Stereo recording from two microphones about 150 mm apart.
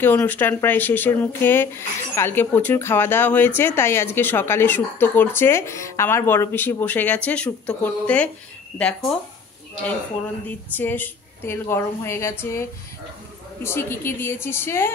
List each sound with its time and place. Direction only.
0.0 s speech: 10° left (ahead or behind)
10.8 s speech: 15° left (ahead or behind)